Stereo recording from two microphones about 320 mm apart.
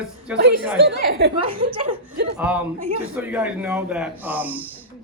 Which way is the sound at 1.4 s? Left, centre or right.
Centre.